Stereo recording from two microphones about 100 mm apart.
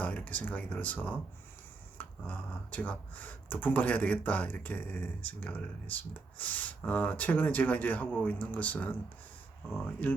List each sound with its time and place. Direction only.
0.0 s speech: 15° left (ahead or behind)